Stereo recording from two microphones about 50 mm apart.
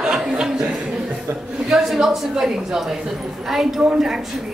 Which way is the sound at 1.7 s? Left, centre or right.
Centre.